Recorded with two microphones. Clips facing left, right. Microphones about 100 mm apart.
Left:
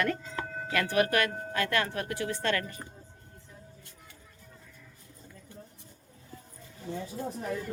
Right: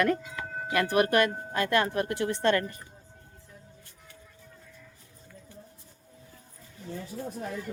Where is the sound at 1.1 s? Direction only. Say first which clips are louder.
Right 4 dB; 20° right (ahead or behind).